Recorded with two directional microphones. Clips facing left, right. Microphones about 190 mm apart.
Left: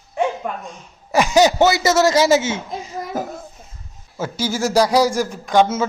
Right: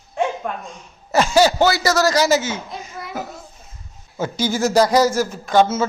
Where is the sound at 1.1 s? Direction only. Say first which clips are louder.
Left 1 dB; 15° left (ahead or behind); by 3.4 s 50° left (ahead or behind).